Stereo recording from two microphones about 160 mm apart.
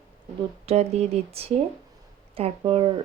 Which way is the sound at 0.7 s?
40° right (ahead or behind).